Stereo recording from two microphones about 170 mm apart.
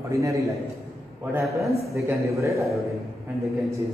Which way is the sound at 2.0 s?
15° right (ahead or behind).